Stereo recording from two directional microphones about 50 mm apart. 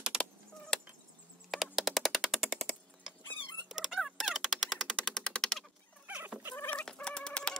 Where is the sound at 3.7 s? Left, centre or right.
Centre.